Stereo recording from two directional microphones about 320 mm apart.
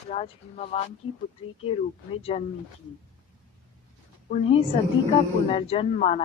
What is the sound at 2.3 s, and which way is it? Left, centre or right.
Speech, centre.